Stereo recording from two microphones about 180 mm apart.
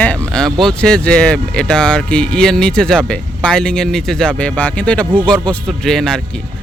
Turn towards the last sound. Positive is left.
turn(degrees=0)  # may be behind; listen again after turning